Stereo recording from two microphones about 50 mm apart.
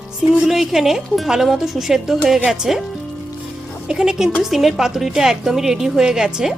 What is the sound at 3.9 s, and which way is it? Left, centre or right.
Speech, centre.